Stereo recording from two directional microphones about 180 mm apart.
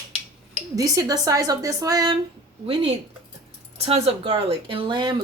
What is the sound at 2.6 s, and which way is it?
Speech, 30° right (ahead or behind).